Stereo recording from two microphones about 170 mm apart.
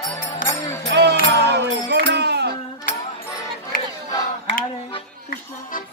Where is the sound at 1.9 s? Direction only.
80° right.